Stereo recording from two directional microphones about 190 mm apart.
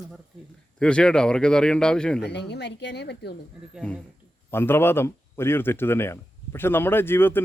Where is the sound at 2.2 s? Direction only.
60° left (ahead or behind).